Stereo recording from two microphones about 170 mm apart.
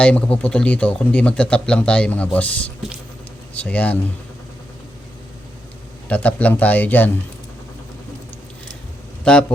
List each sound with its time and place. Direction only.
0.0 s speech: 5° left (ahead or behind)
6.1 s speech: 10° left (ahead or behind)